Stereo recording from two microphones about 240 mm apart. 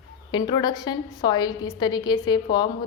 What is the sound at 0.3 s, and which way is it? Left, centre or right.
A woman's voice, centre.